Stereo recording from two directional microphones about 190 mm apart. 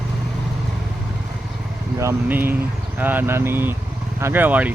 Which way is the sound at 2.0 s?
10° right (ahead or behind).